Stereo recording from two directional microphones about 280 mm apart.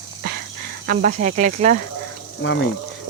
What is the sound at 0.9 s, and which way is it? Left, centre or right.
Speech, right.